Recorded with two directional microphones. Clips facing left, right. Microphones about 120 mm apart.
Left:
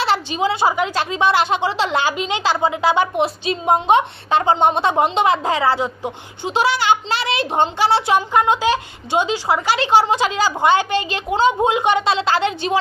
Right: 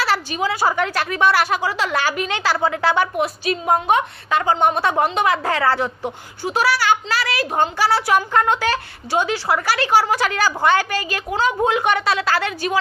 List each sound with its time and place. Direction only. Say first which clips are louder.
0.0 s speech: left 2 dB; 25° left (ahead or behind)